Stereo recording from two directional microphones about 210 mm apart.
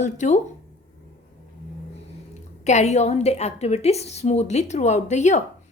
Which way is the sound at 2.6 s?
35° left (ahead or behind).